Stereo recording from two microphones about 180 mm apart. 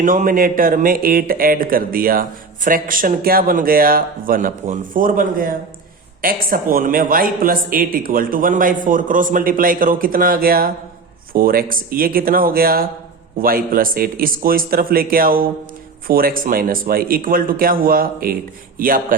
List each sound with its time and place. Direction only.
0.0 s speech: 50° right (ahead or behind)